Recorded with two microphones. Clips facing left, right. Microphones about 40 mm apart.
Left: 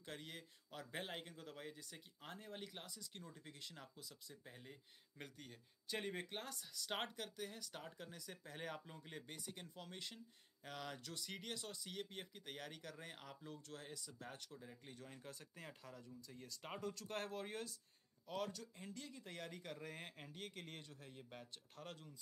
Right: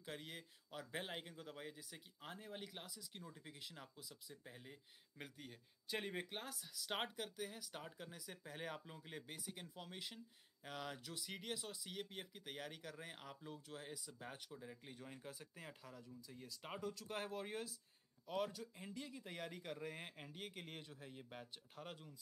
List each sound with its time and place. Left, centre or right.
0.0 s speech: centre